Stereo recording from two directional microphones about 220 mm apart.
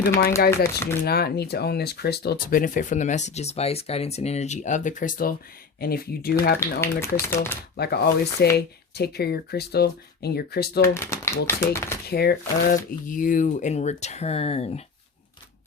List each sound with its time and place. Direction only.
0.5 s speech: 10° left (ahead or behind)
1.0 s speech: 45° left (ahead or behind)
6.8 s speech: 10° left (ahead or behind)
7.8 s speech: 45° left (ahead or behind)
10.9 s speech: 10° left (ahead or behind)
12.0 s speech: 45° left (ahead or behind); by 14.8 s 30° left (ahead or behind)